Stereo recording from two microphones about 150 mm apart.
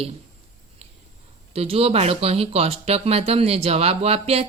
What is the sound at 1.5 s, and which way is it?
Speech, 40° right (ahead or behind).